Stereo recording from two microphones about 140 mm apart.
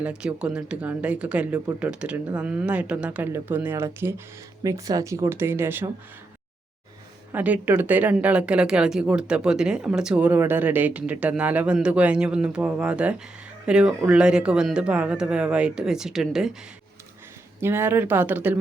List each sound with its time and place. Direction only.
0.0 s speech: 10° right (ahead or behind)
7.3 s speech: 10° right (ahead or behind)
17.6 s speech: 15° right (ahead or behind)